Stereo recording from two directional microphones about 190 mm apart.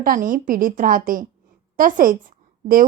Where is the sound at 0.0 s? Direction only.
45° right (ahead or behind).